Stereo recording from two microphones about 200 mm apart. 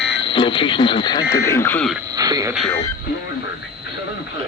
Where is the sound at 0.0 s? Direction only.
65° left (ahead or behind).